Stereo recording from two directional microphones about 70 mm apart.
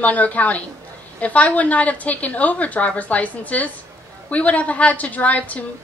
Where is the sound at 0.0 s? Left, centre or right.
Left.